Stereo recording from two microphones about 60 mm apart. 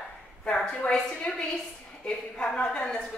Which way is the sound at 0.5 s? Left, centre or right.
Centre.